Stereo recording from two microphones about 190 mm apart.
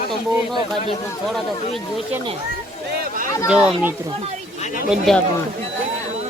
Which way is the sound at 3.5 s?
5° right (ahead or behind).